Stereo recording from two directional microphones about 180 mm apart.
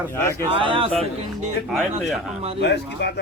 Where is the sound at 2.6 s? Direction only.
70° left (ahead or behind).